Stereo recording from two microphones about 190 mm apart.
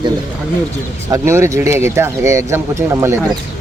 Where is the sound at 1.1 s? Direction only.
15° right (ahead or behind).